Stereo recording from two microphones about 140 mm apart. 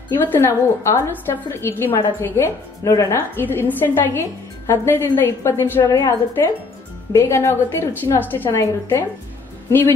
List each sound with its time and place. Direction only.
0.2 s a woman's voice: 15° left (ahead or behind)